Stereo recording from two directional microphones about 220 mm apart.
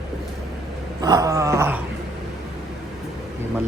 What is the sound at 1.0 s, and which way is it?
Dog, 15° right (ahead or behind).